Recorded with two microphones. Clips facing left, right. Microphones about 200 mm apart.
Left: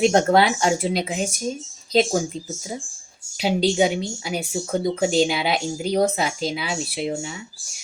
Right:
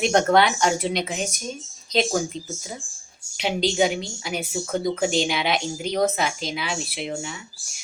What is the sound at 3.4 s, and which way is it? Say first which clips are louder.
Speech: left 2 dB; 25° left (ahead or behind).